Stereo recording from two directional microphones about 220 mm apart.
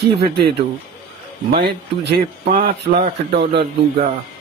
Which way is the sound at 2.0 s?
40° right (ahead or behind).